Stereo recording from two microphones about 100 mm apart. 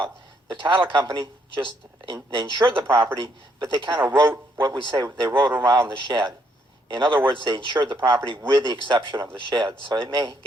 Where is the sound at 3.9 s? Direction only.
25° right (ahead or behind).